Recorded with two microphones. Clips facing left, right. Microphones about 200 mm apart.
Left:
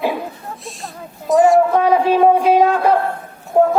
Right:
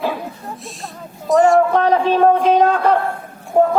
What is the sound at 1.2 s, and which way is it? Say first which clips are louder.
Speech: left 1 dB; centre (ahead or behind).